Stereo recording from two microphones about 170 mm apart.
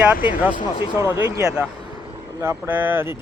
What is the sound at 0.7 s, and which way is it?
Speech, 20° left (ahead or behind).